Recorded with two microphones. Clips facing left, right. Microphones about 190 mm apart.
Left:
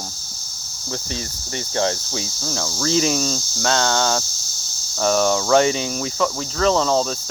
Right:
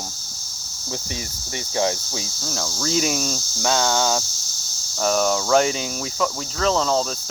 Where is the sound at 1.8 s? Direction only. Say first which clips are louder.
Left 1 dB; 5° right (ahead or behind).